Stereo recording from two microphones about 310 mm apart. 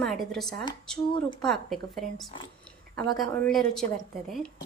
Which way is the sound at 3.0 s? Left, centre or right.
Centre.